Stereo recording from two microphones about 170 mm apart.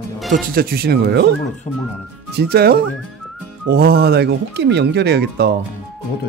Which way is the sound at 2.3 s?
65° right (ahead or behind).